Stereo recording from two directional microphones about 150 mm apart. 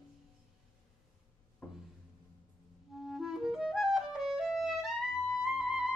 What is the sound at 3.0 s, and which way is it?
Clarinet, centre (ahead or behind).